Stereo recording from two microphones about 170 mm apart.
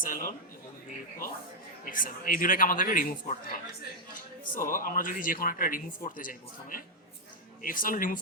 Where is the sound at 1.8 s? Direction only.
55° left (ahead or behind).